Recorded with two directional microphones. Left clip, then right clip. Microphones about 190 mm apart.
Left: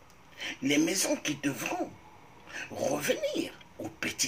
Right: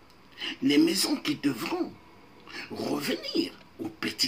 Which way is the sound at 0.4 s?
15° right (ahead or behind).